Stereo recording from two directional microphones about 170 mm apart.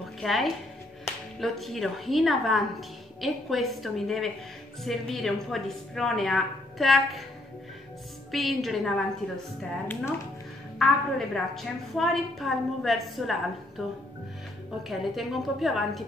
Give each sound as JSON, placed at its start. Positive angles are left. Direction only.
{"t": 0.2, "sound": "a woman's voice", "side_deg": 0}
{"t": 8.3, "sound": "a woman's voice", "side_deg": 0}
{"t": 9.6, "sound": "speech", "side_deg": 10}
{"t": 11.1, "sound": "a woman's voice", "side_deg": 0}